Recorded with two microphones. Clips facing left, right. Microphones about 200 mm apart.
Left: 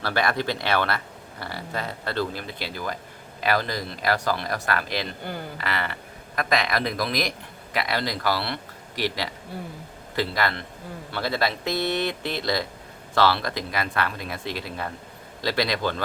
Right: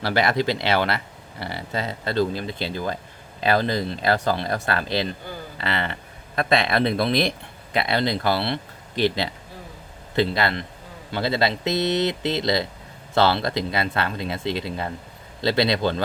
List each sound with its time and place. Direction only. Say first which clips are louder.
0.0 s speech: right 4 dB; 20° right (ahead or behind)
10.2 s speech: right 4 dB; 20° right (ahead or behind)